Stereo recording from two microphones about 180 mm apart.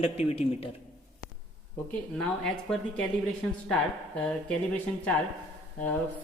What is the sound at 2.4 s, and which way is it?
Speech, 5° left (ahead or behind).